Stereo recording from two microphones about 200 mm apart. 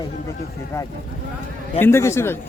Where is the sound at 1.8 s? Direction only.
15° left (ahead or behind).